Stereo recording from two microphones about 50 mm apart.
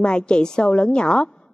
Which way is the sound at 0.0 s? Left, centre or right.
Centre.